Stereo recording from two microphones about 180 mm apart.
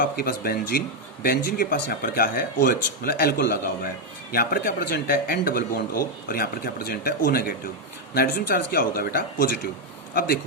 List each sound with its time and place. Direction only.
0.0 s speech: 55° left (ahead or behind)